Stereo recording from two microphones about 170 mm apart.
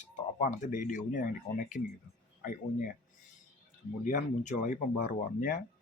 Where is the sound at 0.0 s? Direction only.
50° left (ahead or behind).